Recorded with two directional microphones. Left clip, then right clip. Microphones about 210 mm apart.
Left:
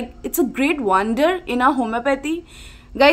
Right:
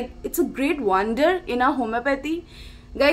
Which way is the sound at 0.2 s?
25° left (ahead or behind).